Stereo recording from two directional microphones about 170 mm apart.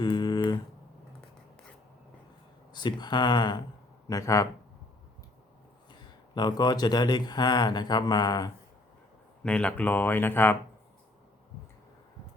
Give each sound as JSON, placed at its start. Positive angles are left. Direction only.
{"t": 0.0, "sound": "a sound", "side_deg": 25}
{"t": 2.7, "sound": "speech", "side_deg": 25}
{"t": 6.3, "sound": "speech", "side_deg": 25}
{"t": 9.4, "sound": "speech", "side_deg": 5}